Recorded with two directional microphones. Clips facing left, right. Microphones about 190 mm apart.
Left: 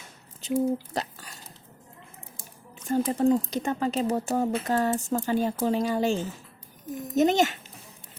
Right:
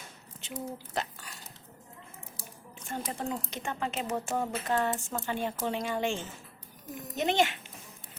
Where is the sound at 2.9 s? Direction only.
40° left (ahead or behind).